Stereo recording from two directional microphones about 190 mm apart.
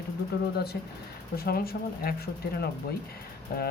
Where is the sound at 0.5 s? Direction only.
55° left (ahead or behind).